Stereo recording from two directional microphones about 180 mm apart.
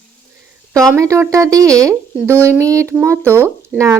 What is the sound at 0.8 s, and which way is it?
Speech, 15° right (ahead or behind).